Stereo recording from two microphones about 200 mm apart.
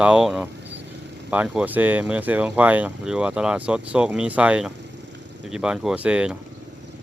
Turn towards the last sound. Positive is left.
turn(degrees=-5)  # may be behind; listen again after turning